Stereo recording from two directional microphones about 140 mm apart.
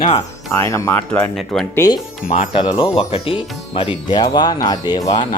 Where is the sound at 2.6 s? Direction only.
35° left (ahead or behind).